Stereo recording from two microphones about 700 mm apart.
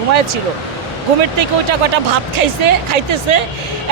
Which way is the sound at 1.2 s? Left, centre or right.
Right.